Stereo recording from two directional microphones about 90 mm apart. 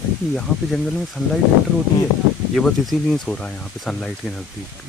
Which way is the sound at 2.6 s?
5° left (ahead or behind).